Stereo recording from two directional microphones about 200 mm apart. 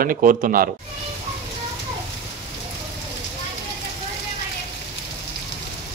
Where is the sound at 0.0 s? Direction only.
45° right (ahead or behind).